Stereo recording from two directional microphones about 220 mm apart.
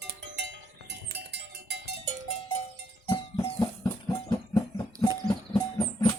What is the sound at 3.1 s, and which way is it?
Music, 20° left (ahead or behind).